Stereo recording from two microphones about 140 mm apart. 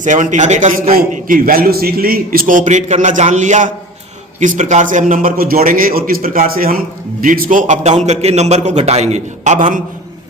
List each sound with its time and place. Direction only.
0.0 s a man's voice: 65° right (ahead or behind)